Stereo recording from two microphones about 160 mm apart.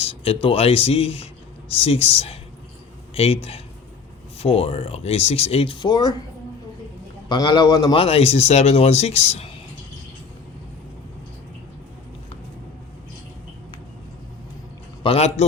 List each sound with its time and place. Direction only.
0.0 s a sound: 35° left (ahead or behind)
0.4 s speech: 40° left (ahead or behind)
7.3 s a man's voice: 30° left (ahead or behind)
8.0 s speech: 40° left (ahead or behind)
15.0 s speech: 40° left (ahead or behind)